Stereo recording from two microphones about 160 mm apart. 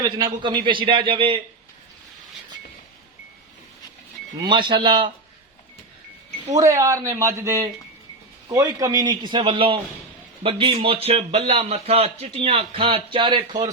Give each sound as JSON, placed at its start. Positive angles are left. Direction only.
{"t": 0.0, "sound": "a man's voice", "side_deg": -25}
{"t": 4.4, "sound": "a man's voice", "side_deg": -30}
{"t": 6.5, "sound": "a man's voice", "side_deg": -20}